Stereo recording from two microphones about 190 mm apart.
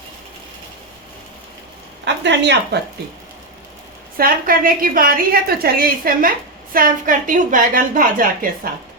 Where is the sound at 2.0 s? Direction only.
70° right (ahead or behind).